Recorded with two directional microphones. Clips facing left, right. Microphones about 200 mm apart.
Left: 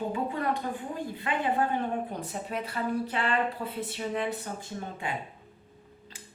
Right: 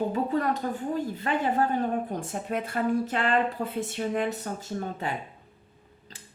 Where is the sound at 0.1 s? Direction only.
40° right (ahead or behind).